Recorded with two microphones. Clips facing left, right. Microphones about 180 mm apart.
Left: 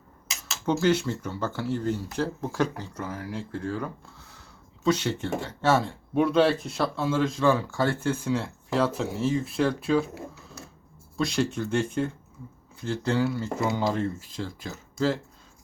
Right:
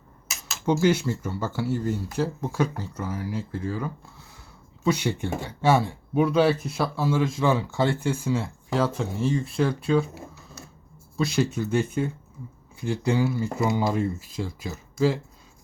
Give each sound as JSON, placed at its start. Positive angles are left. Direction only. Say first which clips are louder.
{"t": 0.6, "sound": "speech", "louder": "right 2 dB", "side_deg": -15}
{"t": 7.3, "sound": "speech", "louder": "even", "side_deg": -20}
{"t": 8.2, "sound": "speech", "louder": "right 1 dB", "side_deg": 0}
{"t": 11.2, "sound": "speech", "louder": "right 2 dB", "side_deg": -5}